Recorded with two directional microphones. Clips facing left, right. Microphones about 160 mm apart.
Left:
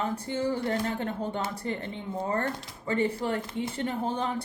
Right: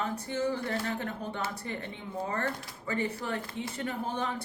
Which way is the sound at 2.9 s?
30° left (ahead or behind).